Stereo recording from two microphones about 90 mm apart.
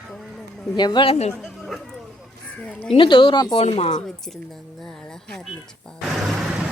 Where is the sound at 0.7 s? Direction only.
55° left (ahead or behind).